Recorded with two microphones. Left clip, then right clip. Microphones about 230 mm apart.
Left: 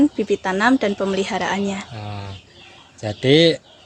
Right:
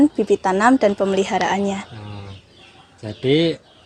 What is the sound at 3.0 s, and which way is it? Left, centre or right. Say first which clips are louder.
Speech: left 4 dB; left.